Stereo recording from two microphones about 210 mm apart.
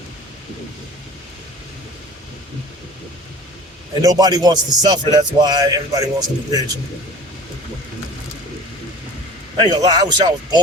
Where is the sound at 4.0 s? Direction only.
20° right (ahead or behind).